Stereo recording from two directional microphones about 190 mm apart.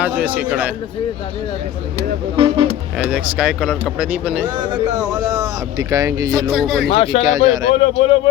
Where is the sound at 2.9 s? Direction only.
5° right (ahead or behind).